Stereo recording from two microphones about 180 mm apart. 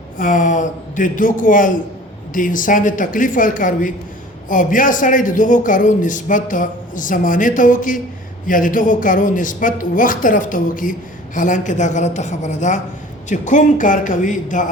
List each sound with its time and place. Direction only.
0.2 s a man's voice: 45° left (ahead or behind)